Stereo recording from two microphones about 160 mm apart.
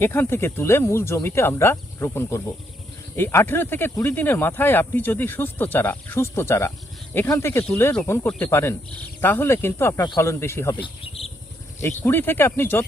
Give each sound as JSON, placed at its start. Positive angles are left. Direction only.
{"t": 0.0, "sound": "speech", "side_deg": 15}
{"t": 10.8, "sound": "cricket", "side_deg": 35}
{"t": 11.8, "sound": "speech", "side_deg": 15}